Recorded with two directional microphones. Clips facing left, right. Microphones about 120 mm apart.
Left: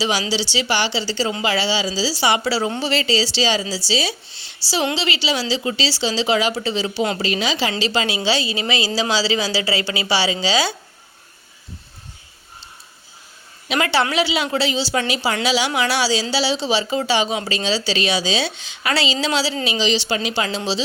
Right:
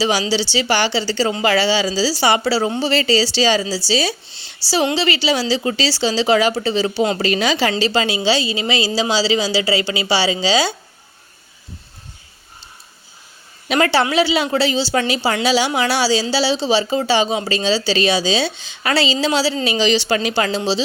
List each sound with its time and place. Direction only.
0.0 s speech: 35° right (ahead or behind)
2.9 s speech: 40° right (ahead or behind)
4.6 s a woman's voice: 10° right (ahead or behind)
4.9 s speech: 45° right (ahead or behind)
7.2 s speech: 50° right (ahead or behind)
7.8 s speech: 35° right (ahead or behind)
13.7 s speech: 40° right (ahead or behind)
19.6 s speech: 50° right (ahead or behind)
20.3 s speech: 35° right (ahead or behind)